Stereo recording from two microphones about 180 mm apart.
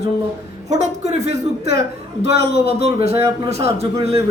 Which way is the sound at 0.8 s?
40° right (ahead or behind).